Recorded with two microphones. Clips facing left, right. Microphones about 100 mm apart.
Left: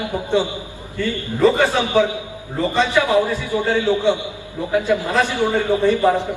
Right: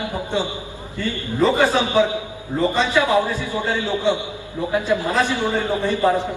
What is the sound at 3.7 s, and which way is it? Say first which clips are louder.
Speech: left 3 dB; 20° right (ahead or behind).